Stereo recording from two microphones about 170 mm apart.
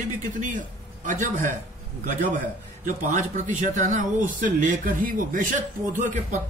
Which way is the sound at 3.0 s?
45° right (ahead or behind).